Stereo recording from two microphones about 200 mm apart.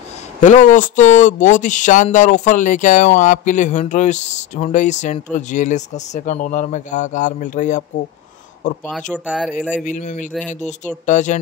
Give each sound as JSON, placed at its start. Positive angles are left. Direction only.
{"t": 0.4, "sound": "speech", "side_deg": 40}
{"t": 9.2, "sound": "speech", "side_deg": -5}
{"t": 9.8, "sound": "speech", "side_deg": 40}